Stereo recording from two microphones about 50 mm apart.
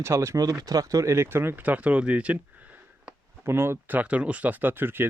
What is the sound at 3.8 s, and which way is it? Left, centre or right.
Speech, right.